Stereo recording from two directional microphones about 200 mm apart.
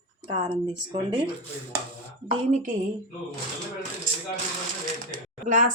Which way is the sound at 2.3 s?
35° right (ahead or behind).